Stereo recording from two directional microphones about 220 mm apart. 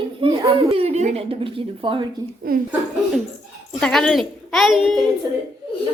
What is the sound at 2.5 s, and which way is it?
Speech, 40° right (ahead or behind).